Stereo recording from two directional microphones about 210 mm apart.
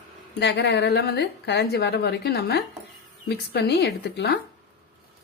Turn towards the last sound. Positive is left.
turn(degrees=55)  # may be behind; listen again after turning